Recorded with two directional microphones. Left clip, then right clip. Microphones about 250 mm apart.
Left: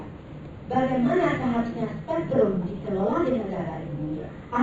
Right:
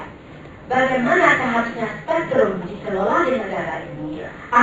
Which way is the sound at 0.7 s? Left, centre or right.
Centre.